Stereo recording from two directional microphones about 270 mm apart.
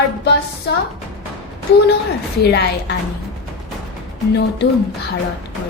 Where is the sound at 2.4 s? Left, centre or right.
Left.